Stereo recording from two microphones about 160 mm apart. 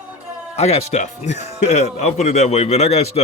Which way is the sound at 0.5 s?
40° left (ahead or behind).